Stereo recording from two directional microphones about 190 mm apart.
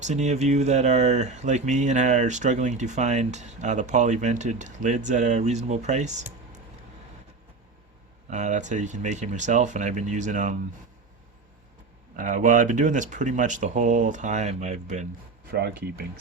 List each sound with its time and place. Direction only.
0.0 s speech: 35° right (ahead or behind)
8.3 s speech: 40° right (ahead or behind)
12.1 s speech: 45° right (ahead or behind)
15.5 s speech: 55° right (ahead or behind)